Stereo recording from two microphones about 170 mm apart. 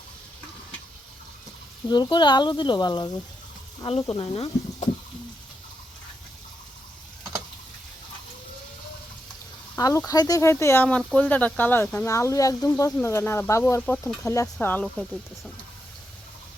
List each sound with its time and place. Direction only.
1.9 s speech: 25° left (ahead or behind)
9.7 s speech: 20° left (ahead or behind)